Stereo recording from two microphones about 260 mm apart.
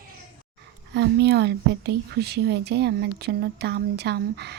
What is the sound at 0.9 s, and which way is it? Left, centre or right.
A woman's voice, right.